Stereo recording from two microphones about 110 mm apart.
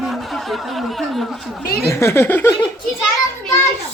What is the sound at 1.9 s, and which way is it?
Speech, 25° left (ahead or behind).